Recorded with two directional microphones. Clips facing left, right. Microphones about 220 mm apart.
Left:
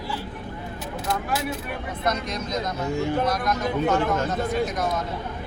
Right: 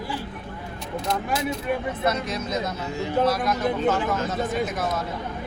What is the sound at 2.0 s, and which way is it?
A man's voice, 5° right (ahead or behind).